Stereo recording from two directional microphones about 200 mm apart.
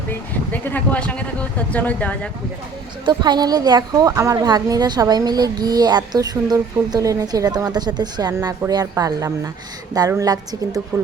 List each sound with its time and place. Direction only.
0.1 s speech: 10° left (ahead or behind)
3.1 s a woman's voice: 20° right (ahead or behind)